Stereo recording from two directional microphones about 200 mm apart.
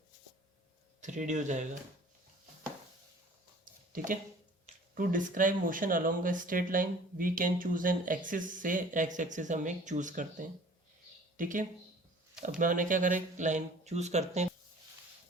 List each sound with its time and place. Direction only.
1.0 s speech: 35° right (ahead or behind)
3.9 s speech: 40° right (ahead or behind)